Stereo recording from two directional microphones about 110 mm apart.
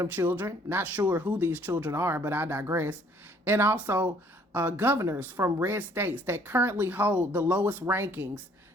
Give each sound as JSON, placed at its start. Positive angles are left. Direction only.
{"t": 0.0, "sound": "speech", "side_deg": -20}